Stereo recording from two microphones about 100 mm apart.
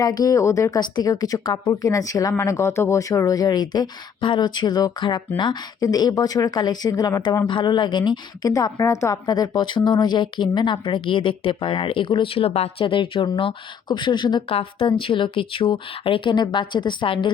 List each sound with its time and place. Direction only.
0.0 s speech: 40° left (ahead or behind)
0.8 s speech: 40° left (ahead or behind)
5.8 s speech: 40° left (ahead or behind)
7.4 s speech: 50° left (ahead or behind)
8.4 s speech: 35° left (ahead or behind)
14.4 s speech: 65° left (ahead or behind)